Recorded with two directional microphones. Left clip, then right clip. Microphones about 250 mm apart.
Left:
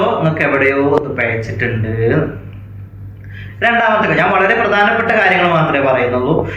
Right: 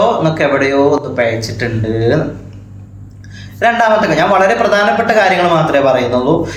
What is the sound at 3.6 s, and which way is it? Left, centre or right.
A man's voice, centre.